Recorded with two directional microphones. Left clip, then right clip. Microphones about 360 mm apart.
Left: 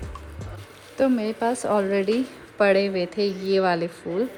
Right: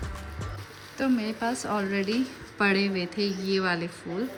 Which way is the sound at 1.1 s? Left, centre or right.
Centre.